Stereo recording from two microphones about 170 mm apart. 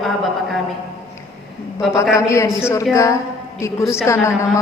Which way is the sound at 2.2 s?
15° left (ahead or behind).